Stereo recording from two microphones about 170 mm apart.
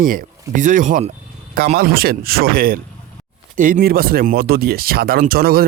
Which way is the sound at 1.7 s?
65° right (ahead or behind).